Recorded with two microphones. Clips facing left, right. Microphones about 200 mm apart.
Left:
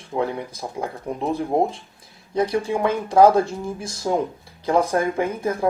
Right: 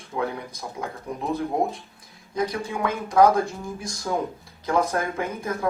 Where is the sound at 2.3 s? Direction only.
30° left (ahead or behind).